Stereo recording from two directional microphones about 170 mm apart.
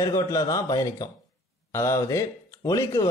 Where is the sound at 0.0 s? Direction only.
20° left (ahead or behind).